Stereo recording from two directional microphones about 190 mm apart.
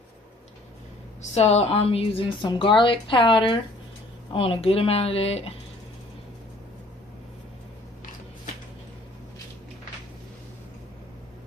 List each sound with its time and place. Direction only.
1.2 s a woman's voice: 35° left (ahead or behind)